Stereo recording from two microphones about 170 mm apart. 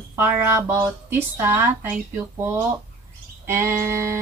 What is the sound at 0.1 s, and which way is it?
Speech, 15° right (ahead or behind).